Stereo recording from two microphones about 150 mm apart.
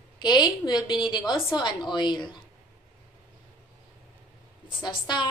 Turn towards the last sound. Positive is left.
turn(degrees=30)  # may be behind; listen again after turning